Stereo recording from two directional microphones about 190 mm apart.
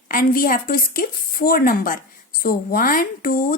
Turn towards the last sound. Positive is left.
turn(degrees=50)  # may be behind; listen again after turning